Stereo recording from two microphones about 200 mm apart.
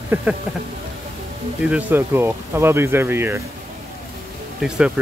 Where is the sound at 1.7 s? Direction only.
10° right (ahead or behind).